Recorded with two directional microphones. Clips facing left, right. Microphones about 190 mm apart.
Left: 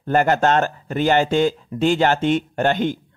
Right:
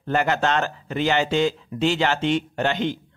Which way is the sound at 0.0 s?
45° left (ahead or behind).